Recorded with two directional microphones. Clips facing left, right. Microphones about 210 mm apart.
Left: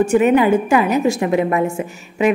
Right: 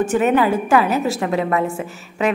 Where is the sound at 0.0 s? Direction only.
10° left (ahead or behind).